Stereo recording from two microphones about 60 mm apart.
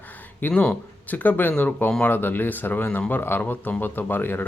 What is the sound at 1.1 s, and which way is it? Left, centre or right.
Speech, left.